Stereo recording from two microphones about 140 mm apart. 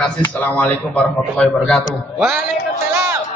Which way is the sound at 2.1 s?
10° right (ahead or behind).